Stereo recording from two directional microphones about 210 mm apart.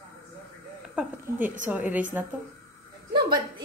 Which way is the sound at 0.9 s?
10° right (ahead or behind).